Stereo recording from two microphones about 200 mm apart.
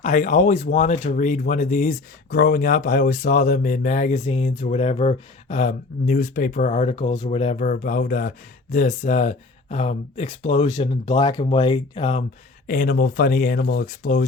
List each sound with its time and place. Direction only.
0.0 s speech: 40° left (ahead or behind)
11.2 s speech: 25° left (ahead or behind)
12.6 s speech: 45° left (ahead or behind)